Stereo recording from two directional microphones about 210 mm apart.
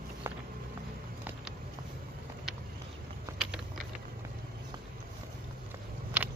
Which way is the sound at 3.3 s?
15° right (ahead or behind).